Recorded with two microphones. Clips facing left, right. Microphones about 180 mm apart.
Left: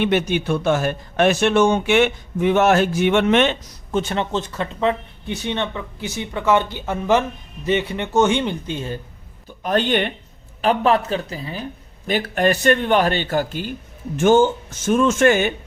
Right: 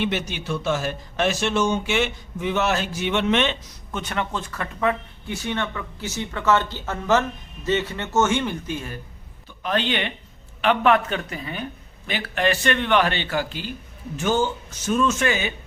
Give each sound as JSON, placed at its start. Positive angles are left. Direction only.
{"t": 0.0, "sound": "speech", "side_deg": 55}
{"t": 3.9, "sound": "speech", "side_deg": 30}
{"t": 9.6, "sound": "speech", "side_deg": 45}
{"t": 10.6, "sound": "speech", "side_deg": 35}